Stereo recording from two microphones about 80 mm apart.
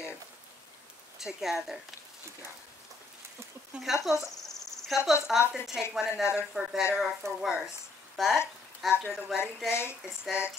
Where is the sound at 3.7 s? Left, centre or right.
Centre.